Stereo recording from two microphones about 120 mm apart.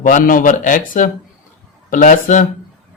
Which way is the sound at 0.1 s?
90° left.